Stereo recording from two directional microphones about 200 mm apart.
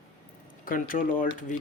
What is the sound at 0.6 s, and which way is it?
Speech, 45° left (ahead or behind).